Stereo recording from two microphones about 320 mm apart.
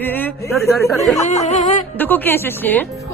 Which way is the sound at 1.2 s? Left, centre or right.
Left.